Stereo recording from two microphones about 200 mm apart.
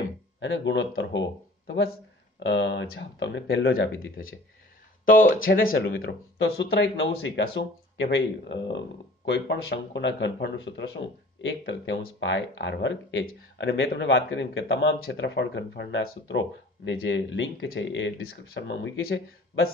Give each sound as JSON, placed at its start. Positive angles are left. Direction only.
{"t": 0.4, "sound": "speech", "side_deg": 65}
{"t": 5.0, "sound": "speech", "side_deg": 45}
{"t": 5.9, "sound": "speech", "side_deg": 65}